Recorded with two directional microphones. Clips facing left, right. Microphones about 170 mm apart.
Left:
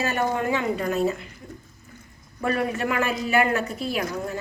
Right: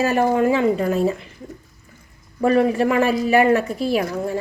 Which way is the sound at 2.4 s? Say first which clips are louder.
Right 8 dB; 35° right (ahead or behind).